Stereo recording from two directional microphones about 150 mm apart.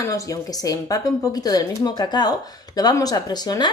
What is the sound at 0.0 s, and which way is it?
A woman's voice, 20° left (ahead or behind).